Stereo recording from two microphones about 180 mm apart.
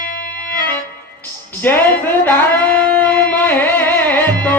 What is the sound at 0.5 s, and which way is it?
Music, 10° left (ahead or behind).